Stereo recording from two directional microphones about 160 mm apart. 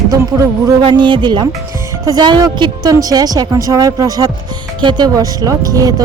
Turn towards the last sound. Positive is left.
turn(degrees=-25)  # may be behind; listen again after turning